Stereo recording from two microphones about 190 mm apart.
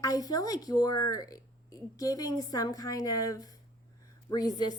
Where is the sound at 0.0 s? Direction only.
20° left (ahead or behind).